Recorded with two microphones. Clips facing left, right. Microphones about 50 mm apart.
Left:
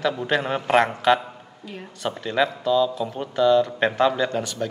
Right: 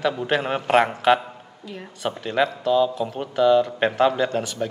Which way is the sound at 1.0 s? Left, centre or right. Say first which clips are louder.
Right 1 dB; centre.